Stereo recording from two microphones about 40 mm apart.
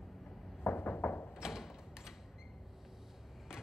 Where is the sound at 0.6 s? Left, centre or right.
Left.